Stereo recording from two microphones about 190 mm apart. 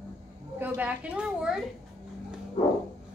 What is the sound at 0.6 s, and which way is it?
A woman's voice, 5° right (ahead or behind).